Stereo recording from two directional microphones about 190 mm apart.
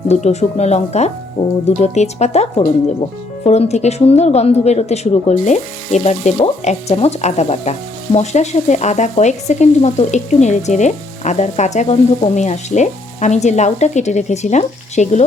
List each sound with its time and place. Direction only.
0.1 s speech: 35° left (ahead or behind)